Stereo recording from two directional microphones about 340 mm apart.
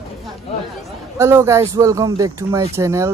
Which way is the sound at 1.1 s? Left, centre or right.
Centre.